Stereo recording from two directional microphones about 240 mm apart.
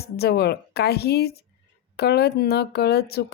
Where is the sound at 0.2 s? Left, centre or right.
Left.